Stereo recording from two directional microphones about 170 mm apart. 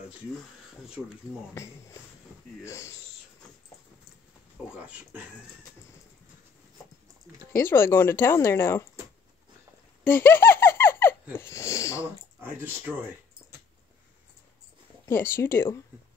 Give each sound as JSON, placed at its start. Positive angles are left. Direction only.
{"t": 2.6, "sound": "speech", "side_deg": 15}
{"t": 4.8, "sound": "speech", "side_deg": -5}
{"t": 7.5, "sound": "speech", "side_deg": 15}
{"t": 10.0, "sound": "laughter", "side_deg": 15}
{"t": 12.4, "sound": "speech", "side_deg": -10}
{"t": 15.0, "sound": "speech", "side_deg": 15}